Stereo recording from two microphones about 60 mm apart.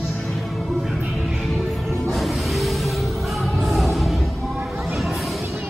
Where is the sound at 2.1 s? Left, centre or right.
Centre.